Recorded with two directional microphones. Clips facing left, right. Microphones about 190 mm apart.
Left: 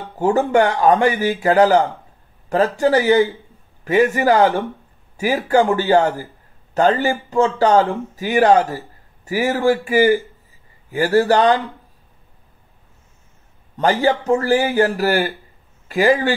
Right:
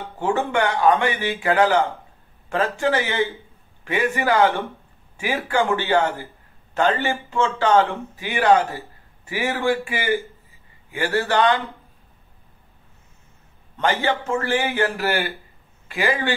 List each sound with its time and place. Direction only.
0.2 s a man's voice: 40° left (ahead or behind)
13.7 s a man's voice: 40° left (ahead or behind)